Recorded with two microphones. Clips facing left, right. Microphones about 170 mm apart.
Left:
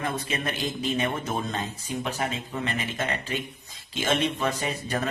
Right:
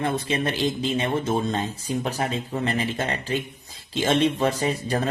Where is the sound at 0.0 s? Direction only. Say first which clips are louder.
Right 5 dB; 30° right (ahead or behind).